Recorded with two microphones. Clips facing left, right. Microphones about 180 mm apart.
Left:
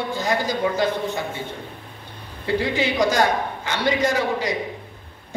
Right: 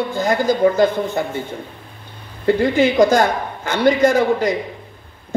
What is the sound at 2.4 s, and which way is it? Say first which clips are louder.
Speech: right 7 dB; 50° right (ahead or behind).